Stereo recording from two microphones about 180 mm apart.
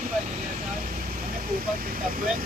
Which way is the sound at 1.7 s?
50° right (ahead or behind).